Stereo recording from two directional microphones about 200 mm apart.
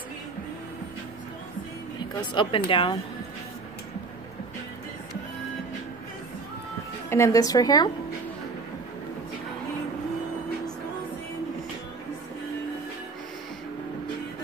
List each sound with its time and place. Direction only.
2.3 s speech: 25° left (ahead or behind)
7.1 s speech: 15° left (ahead or behind)